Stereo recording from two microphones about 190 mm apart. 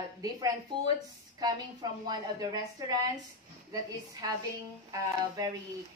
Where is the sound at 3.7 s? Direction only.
20° right (ahead or behind).